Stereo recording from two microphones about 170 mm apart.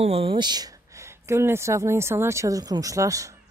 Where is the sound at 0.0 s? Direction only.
35° right (ahead or behind).